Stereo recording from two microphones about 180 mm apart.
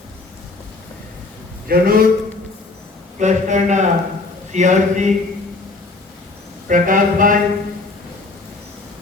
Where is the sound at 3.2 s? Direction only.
40° right (ahead or behind).